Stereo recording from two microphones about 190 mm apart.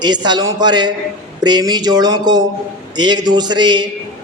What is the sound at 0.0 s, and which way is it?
A woman's voice, 20° right (ahead or behind).